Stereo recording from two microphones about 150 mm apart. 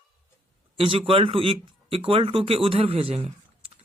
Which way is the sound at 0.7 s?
35° right (ahead or behind).